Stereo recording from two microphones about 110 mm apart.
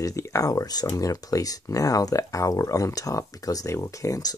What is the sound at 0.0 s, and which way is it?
Speech, 30° left (ahead or behind).